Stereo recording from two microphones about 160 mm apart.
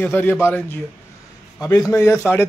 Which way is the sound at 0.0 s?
10° left (ahead or behind).